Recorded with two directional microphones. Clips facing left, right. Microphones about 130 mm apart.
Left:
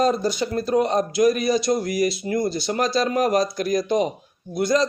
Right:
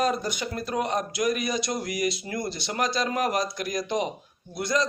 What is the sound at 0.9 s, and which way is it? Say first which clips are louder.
Speech: left 6 dB; 25° left (ahead or behind).